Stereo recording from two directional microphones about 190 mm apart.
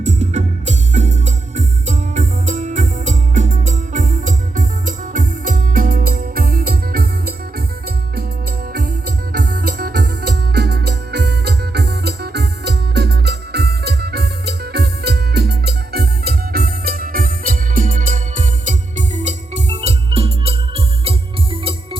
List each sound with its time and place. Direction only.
0.0 s music: 40° right (ahead or behind)
8.7 s music: 55° right (ahead or behind); by 21.8 s 30° right (ahead or behind)